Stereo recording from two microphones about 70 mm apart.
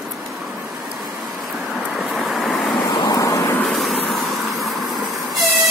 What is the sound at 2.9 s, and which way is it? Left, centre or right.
Vehicle, left.